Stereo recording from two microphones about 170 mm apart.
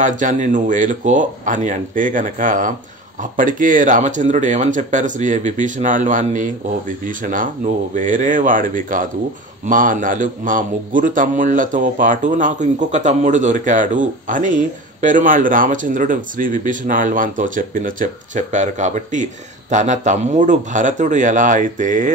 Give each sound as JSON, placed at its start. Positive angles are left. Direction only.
{"t": 0.0, "sound": "speech", "side_deg": -50}